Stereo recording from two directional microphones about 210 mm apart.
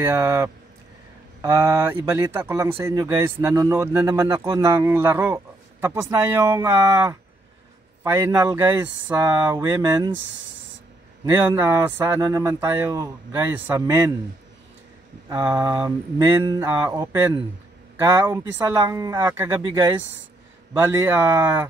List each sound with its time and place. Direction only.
0.0 s speech: 10° right (ahead or behind)
11.3 s speech: 10° right (ahead or behind)
15.2 s speech: 20° right (ahead or behind)